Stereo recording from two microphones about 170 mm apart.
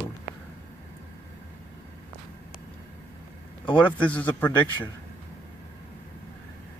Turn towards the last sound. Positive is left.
turn(degrees=10)  # may be behind; listen again after turning